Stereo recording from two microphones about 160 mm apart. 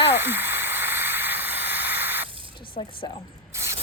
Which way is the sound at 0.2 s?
15° right (ahead or behind).